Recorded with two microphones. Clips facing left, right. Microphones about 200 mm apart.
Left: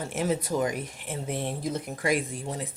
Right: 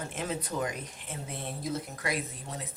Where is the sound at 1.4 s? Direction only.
80° left.